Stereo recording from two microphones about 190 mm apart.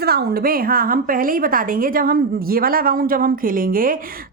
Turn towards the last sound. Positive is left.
turn(degrees=-50)  # may be behind; listen again after turning